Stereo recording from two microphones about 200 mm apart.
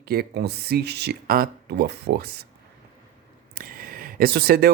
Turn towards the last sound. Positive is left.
turn(degrees=-50)  # may be behind; listen again after turning